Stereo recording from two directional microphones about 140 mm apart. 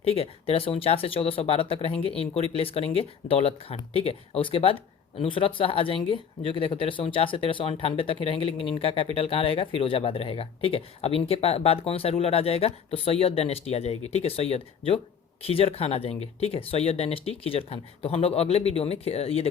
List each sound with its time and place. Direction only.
0.0 s speech: 45° left (ahead or behind)